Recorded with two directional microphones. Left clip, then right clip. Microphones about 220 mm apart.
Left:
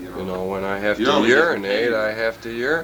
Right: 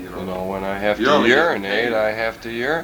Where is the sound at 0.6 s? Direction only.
35° right (ahead or behind).